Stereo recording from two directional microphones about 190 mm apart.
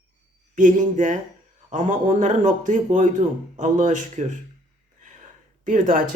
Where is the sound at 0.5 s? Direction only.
40° right (ahead or behind).